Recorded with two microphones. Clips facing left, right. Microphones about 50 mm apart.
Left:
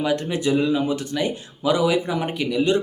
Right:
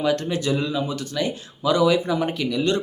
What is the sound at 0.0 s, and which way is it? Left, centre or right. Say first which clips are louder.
Speech: even; centre.